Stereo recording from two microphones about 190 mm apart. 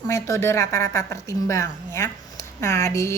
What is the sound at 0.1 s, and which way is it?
A woman's voice, 15° left (ahead or behind).